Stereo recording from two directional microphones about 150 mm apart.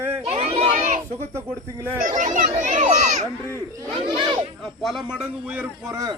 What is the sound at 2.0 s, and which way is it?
Speech, 60° right (ahead or behind).